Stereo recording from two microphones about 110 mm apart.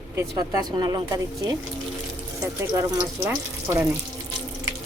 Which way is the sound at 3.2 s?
25° right (ahead or behind).